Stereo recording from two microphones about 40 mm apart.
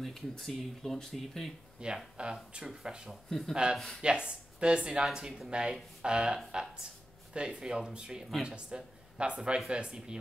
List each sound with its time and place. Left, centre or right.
0.0 s speech: centre
1.8 s speech: right
2.6 s speech: centre
3.3 s speech: centre
4.0 s speech: right